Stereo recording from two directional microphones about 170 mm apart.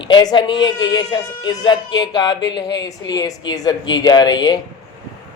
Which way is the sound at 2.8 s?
25° left (ahead or behind).